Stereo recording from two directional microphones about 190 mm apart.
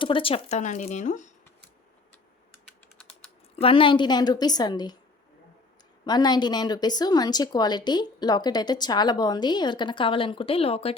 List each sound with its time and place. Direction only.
0.0 s speech: 30° left (ahead or behind)
3.5 s speech: 30° left (ahead or behind)
6.1 s speech: 20° left (ahead or behind)